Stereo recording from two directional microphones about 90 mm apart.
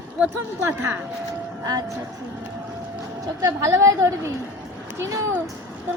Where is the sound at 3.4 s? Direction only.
30° right (ahead or behind).